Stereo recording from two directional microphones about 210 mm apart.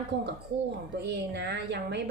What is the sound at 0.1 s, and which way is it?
A woman's voice, 55° right (ahead or behind).